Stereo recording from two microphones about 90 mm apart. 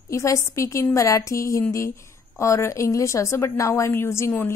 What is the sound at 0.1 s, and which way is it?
A woman's voice, 35° left (ahead or behind).